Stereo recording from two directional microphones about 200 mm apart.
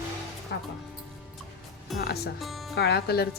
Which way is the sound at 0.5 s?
60° left (ahead or behind).